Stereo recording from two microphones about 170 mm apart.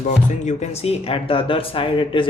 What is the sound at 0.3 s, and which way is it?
Speech, 40° left (ahead or behind).